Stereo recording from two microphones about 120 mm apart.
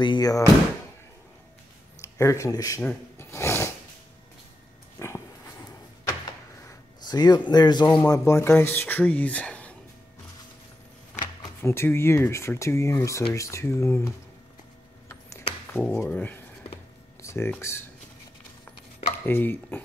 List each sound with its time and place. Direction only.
0.0 s speech: 35° left (ahead or behind)
2.0 s speech: 25° left (ahead or behind)
2.8 s speech: 10° left (ahead or behind)
3.3 s a sound: 25° left (ahead or behind)
4.9 s a sound: 20° left (ahead or behind)
8.1 s speech: 25° left (ahead or behind)
11.6 s speech: 20° left (ahead or behind)
15.7 s speech: 15° left (ahead or behind)
19.2 s speech: 15° left (ahead or behind)